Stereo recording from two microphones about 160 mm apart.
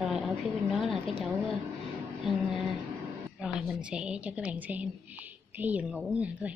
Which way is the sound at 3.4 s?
5° right (ahead or behind).